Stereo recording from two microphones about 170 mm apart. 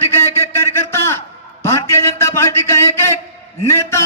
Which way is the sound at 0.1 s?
15° left (ahead or behind).